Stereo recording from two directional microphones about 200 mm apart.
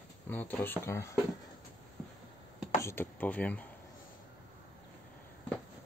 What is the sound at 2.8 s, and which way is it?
Speech, 10° left (ahead or behind).